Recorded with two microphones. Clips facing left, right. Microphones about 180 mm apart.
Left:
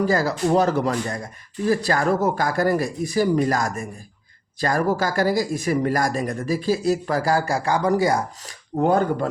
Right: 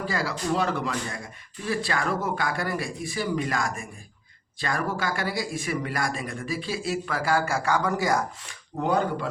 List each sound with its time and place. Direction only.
0.0 s speech: 40° left (ahead or behind)